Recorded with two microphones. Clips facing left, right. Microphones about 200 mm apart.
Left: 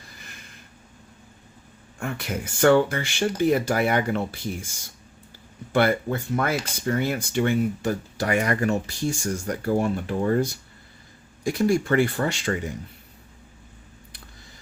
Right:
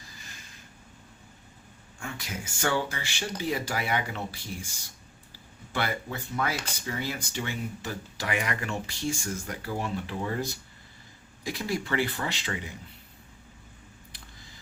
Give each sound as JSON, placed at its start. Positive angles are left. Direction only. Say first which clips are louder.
{"t": 2.0, "sound": "speech", "louder": "left 8 dB", "side_deg": 60}
{"t": 11.4, "sound": "speech", "louder": "left 10 dB", "side_deg": 45}